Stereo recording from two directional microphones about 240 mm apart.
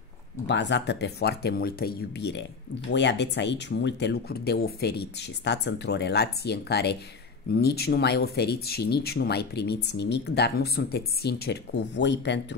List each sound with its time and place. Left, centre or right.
0.5 s speech: left